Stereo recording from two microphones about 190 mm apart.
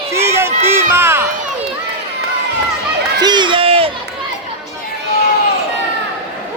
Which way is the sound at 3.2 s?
25° right (ahead or behind).